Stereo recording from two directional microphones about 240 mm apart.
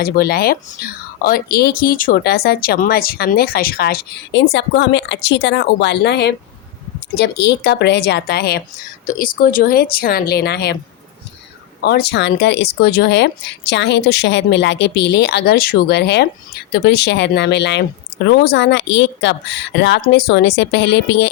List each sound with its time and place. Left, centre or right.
0.0 s speech: left
11.8 s speech: left